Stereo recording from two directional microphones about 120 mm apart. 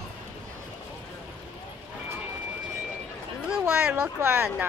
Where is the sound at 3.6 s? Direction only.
20° right (ahead or behind).